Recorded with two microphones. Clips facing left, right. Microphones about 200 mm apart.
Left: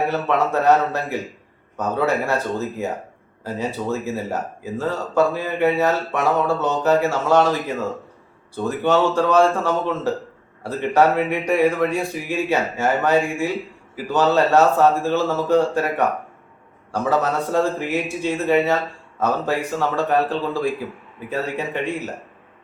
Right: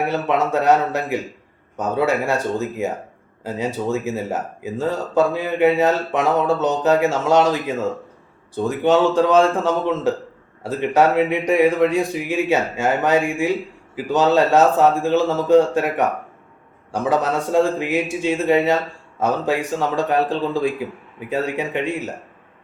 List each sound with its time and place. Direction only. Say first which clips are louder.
0.1 s speech: right 1 dB; 15° right (ahead or behind)